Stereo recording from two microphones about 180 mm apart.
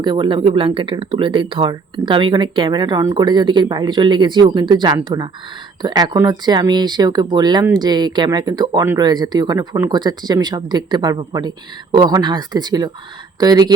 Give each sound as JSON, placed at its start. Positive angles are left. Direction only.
{"t": 0.0, "sound": "speech", "side_deg": -25}